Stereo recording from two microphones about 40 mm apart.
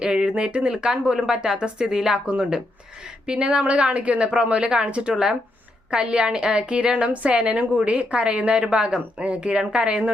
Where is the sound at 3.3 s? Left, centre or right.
Right.